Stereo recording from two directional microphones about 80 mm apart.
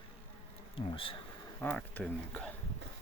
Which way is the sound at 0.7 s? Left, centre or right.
Left.